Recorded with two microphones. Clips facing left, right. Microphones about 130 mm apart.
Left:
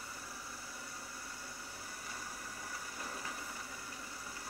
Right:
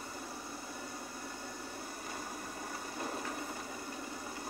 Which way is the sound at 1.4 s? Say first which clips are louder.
Right 6 dB; 55° right (ahead or behind).